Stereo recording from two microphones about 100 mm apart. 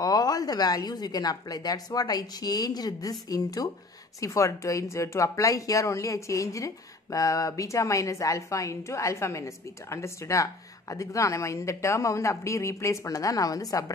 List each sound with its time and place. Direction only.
0.0 s speech: 40° left (ahead or behind)